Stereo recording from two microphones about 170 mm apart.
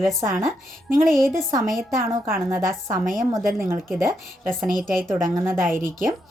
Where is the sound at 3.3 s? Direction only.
15° right (ahead or behind).